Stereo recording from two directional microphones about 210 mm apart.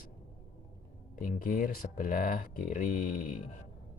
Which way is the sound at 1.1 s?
40° left (ahead or behind).